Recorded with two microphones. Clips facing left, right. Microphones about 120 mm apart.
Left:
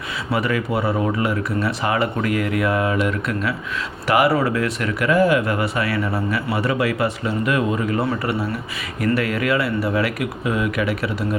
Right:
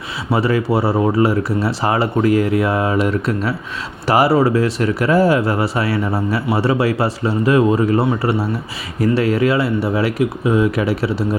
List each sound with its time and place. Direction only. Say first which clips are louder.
0.3 s speech: right 5 dB; 30° right (ahead or behind)